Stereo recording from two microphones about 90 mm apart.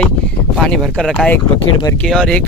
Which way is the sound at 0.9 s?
10° left (ahead or behind).